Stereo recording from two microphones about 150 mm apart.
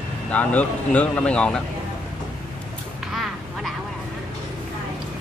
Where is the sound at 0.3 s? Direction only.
10° left (ahead or behind).